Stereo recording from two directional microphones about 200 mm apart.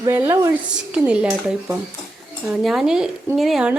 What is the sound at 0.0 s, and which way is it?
A woman's voice, 15° right (ahead or behind).